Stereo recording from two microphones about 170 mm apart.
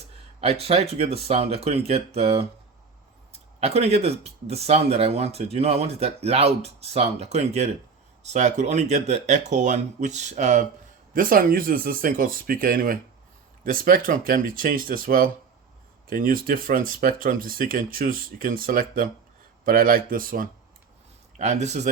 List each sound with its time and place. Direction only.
0.4 s speech: 35° right (ahead or behind)
11.1 s speech: 55° right (ahead or behind)
21.3 s speech: 45° right (ahead or behind)